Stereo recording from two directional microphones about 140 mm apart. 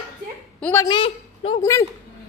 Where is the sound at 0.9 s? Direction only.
40° left (ahead or behind).